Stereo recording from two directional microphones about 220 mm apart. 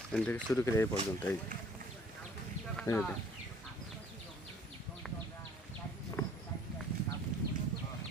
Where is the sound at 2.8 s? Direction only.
5° left (ahead or behind).